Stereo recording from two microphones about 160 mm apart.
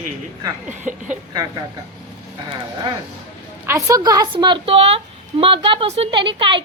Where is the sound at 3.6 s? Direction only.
20° right (ahead or behind).